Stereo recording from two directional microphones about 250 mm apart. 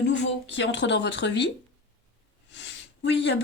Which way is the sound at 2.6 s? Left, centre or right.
Left.